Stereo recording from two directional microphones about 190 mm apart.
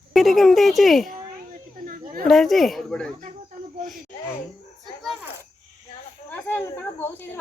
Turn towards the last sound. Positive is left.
turn(degrees=10)  # may be behind; listen again after turning